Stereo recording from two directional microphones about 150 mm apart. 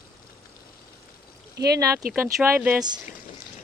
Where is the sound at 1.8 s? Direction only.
20° right (ahead or behind).